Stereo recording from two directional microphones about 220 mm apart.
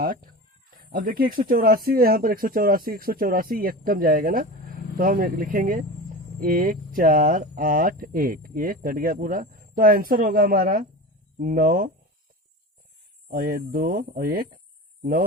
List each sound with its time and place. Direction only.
0.0 s speech: 40° right (ahead or behind)
13.3 s speech: 40° right (ahead or behind)